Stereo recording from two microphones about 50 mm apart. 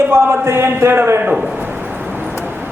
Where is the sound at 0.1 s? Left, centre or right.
Right.